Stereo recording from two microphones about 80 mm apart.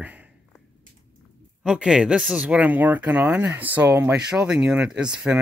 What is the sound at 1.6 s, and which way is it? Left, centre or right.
Speech, centre.